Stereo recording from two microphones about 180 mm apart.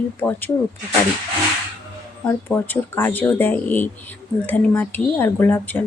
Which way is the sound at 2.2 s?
10° left (ahead or behind).